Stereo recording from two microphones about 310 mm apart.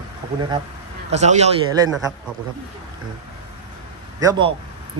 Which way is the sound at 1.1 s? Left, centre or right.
Right.